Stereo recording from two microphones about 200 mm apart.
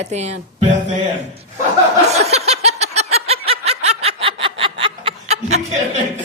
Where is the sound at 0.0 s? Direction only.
35° right (ahead or behind).